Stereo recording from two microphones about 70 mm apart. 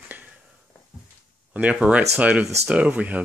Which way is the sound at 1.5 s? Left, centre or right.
Centre.